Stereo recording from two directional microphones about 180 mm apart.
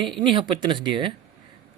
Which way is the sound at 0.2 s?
25° right (ahead or behind).